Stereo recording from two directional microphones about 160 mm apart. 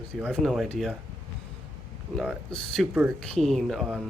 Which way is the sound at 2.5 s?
5° left (ahead or behind).